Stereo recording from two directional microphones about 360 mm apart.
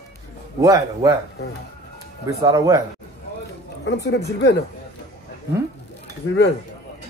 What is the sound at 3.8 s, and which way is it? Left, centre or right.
Speech, left.